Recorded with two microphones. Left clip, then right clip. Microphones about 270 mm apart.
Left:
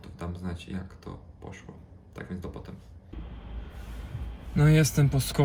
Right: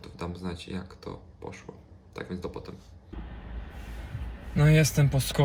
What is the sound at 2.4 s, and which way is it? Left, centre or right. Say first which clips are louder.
Speech: right 4 dB; left.